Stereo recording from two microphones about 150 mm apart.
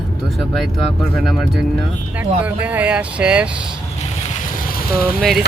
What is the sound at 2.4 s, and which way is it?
Speech, 10° right (ahead or behind).